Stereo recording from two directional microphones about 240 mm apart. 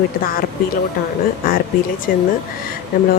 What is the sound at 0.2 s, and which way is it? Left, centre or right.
Speech, left.